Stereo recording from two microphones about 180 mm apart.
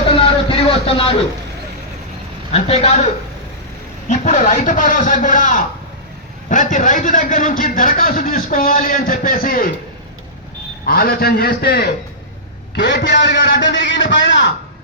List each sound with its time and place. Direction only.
0.4 s a sound: 30° left (ahead or behind)
2.5 s speech: 35° left (ahead or behind)
4.1 s a man's voice: 45° left (ahead or behind)
10.8 s a man's voice: 55° left (ahead or behind)
12.7 s a man's voice: 75° left (ahead or behind)